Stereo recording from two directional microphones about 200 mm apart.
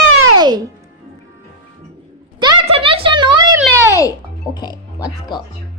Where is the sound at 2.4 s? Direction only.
25° right (ahead or behind).